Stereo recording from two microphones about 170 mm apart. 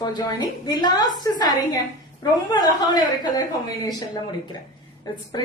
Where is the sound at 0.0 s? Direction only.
25° left (ahead or behind).